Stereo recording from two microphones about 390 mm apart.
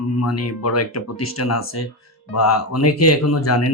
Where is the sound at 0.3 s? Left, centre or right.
Left.